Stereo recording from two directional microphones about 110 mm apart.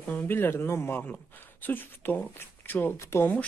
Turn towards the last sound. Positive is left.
turn(degrees=15)  # may be behind; listen again after turning